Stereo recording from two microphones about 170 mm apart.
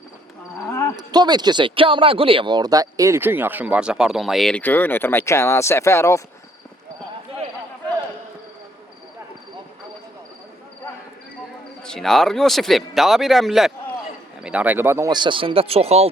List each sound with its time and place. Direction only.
0.6 s a sound: 20° left (ahead or behind)
0.9 s speech: 25° right (ahead or behind); by 6.2 s 15° left (ahead or behind)
11.8 s speech: 5° left (ahead or behind); by 16.0 s 35° right (ahead or behind)